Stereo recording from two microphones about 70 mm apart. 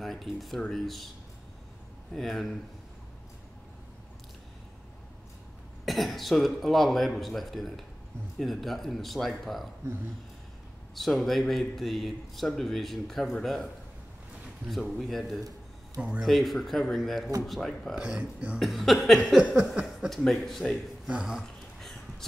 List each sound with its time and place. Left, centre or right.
0.0 s speech: centre
2.1 s speech: centre
5.9 s speech: centre
11.0 s speech: centre
15.0 s speech: centre
16.0 s speech: centre
16.3 s speech: centre
17.9 s speech: centre
18.6 s speech: centre
20.1 s speech: centre
21.1 s speech: centre